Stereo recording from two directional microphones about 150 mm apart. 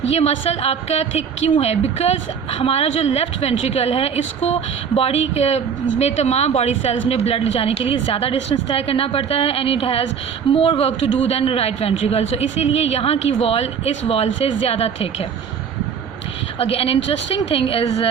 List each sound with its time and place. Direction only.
0.1 s a woman's voice: 45° left (ahead or behind)
16.6 s a woman's voice: 40° left (ahead or behind)